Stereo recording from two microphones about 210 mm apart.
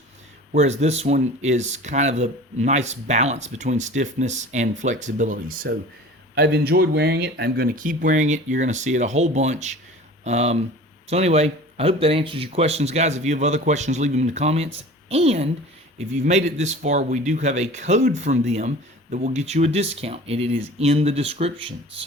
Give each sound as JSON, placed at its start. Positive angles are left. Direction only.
{"t": 0.5, "sound": "speech", "side_deg": -30}
{"t": 6.3, "sound": "speech", "side_deg": -50}